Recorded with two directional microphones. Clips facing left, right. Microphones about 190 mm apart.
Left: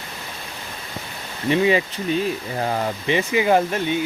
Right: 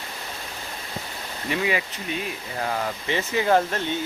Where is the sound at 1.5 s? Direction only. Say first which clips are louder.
Left 8 dB; 25° left (ahead or behind).